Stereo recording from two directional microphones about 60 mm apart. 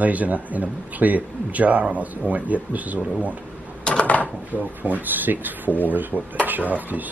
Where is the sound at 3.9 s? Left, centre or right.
Left.